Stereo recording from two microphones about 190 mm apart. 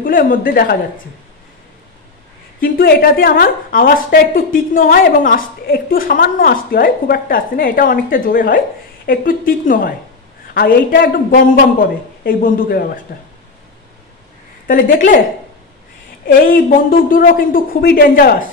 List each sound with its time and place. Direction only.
0.0 s a woman's voice: 45° left (ahead or behind)
2.6 s a woman's voice: 50° left (ahead or behind)
14.7 s a woman's voice: 45° left (ahead or behind)
16.3 s a woman's voice: 45° left (ahead or behind)